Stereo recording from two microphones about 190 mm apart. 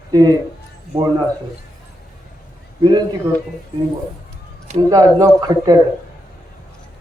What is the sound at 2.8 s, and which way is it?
Speech, 25° right (ahead or behind).